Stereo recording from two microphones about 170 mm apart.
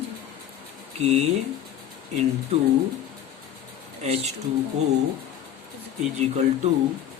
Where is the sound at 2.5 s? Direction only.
35° right (ahead or behind).